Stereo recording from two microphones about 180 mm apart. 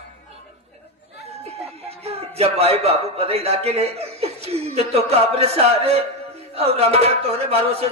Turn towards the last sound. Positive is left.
turn(degrees=-35)  # may be behind; listen again after turning